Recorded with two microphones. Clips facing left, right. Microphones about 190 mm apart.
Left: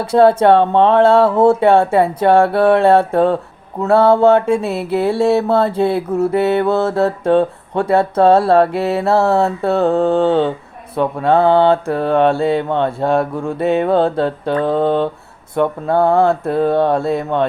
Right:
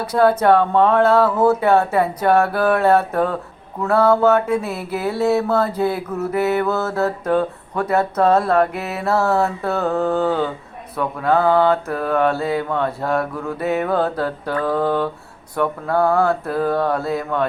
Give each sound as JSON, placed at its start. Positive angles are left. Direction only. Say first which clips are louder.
{"t": 0.0, "sound": "mantra", "louder": "left 5 dB", "side_deg": 25}